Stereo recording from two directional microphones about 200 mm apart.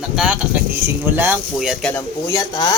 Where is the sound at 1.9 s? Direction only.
15° left (ahead or behind).